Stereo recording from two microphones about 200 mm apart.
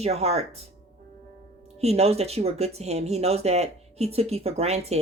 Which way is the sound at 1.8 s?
30° right (ahead or behind).